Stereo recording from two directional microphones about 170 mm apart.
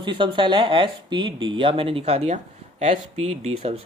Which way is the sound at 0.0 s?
30° right (ahead or behind).